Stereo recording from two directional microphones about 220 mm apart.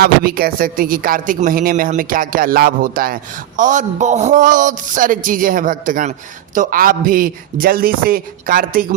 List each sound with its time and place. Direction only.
0.0 s a man's voice: 45° right (ahead or behind)